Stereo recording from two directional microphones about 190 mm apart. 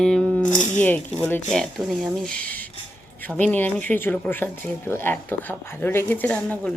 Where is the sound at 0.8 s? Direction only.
10° left (ahead or behind).